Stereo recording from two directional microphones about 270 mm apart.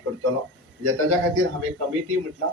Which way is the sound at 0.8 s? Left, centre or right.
Right.